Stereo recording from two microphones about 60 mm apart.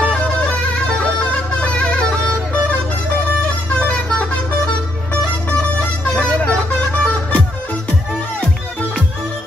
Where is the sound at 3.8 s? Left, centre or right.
Left.